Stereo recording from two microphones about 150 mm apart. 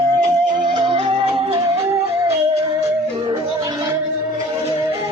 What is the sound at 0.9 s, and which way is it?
Music, 40° right (ahead or behind).